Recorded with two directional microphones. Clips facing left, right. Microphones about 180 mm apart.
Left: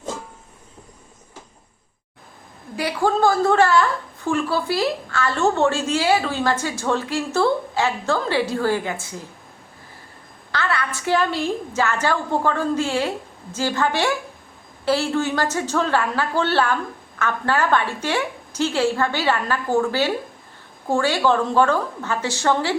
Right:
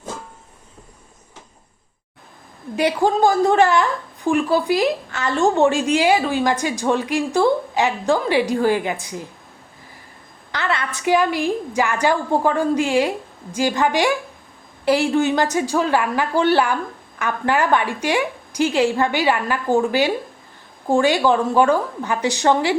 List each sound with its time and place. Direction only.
2.7 s a woman's voice: 20° right (ahead or behind)
10.5 s a woman's voice: 20° right (ahead or behind)